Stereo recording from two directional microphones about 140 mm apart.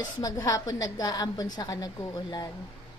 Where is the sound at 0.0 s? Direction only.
25° left (ahead or behind).